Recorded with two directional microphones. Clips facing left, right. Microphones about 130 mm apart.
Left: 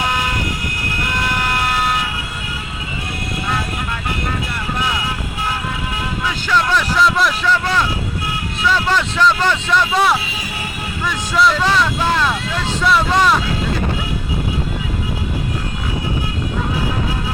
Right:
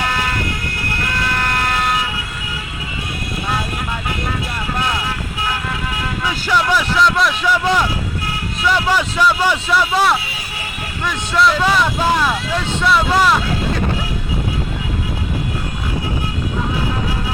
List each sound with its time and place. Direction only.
6.2 s a sound: 10° right (ahead or behind)
7.4 s vehicle: 15° right (ahead or behind)
8.6 s speech: 10° right (ahead or behind)